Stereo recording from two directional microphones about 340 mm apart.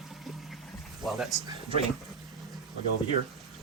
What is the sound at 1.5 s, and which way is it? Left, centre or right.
Speech, centre.